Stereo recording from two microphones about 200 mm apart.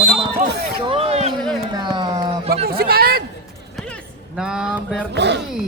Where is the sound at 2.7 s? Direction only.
50° right (ahead or behind).